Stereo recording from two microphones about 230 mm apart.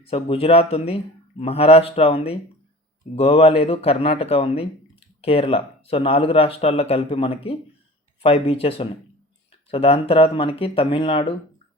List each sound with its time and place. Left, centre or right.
0.0 s speech: left